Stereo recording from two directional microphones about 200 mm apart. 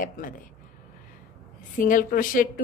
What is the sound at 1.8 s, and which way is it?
Speech, 45° left (ahead or behind).